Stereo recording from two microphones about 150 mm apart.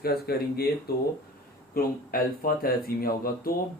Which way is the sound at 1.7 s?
75° left (ahead or behind).